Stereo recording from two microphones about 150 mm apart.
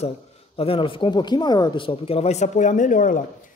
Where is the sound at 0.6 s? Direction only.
35° left (ahead or behind).